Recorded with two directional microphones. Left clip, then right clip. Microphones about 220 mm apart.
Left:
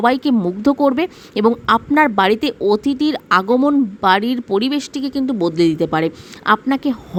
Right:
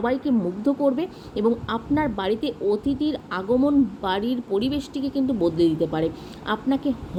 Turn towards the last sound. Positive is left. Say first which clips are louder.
# left 9 dB
turn(degrees=45)  # may be behind; listen again after turning